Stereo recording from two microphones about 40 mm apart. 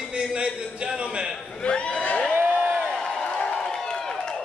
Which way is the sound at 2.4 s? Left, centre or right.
Right.